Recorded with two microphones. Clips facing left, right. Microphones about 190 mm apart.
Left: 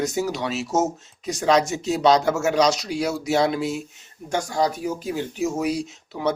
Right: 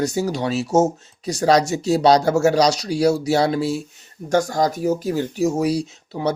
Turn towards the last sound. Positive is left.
turn(degrees=-35)  # may be behind; listen again after turning